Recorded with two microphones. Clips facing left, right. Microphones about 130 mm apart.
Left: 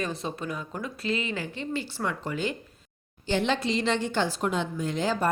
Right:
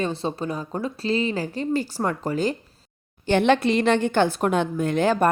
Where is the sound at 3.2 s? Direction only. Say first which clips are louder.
Right 8 dB; 60° right (ahead or behind).